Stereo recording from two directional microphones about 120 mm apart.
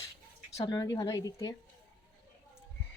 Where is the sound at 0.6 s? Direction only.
30° left (ahead or behind).